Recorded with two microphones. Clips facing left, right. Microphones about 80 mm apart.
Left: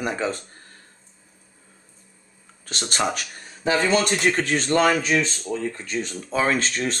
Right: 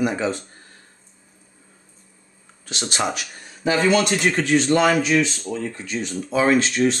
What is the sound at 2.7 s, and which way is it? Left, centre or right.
Speech, left.